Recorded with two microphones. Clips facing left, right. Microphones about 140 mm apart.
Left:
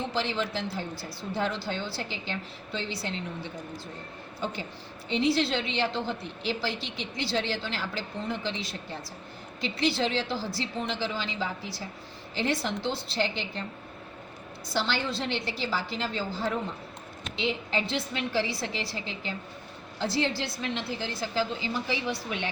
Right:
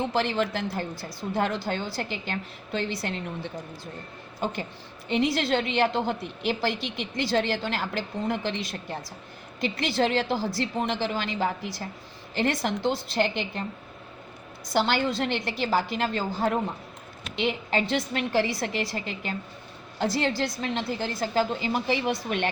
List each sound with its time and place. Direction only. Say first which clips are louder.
0.1 s a woman's voice: right 4 dB; 55° right (ahead or behind)
5.0 s a woman's voice: right 1 dB; 50° right (ahead or behind)
14.8 s a woman's voice: right 5 dB; 50° right (ahead or behind)